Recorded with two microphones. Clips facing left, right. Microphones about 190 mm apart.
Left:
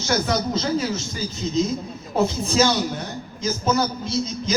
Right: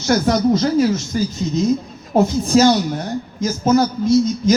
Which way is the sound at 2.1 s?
45° right (ahead or behind).